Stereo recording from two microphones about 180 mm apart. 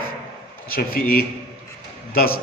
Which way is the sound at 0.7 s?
55° left (ahead or behind).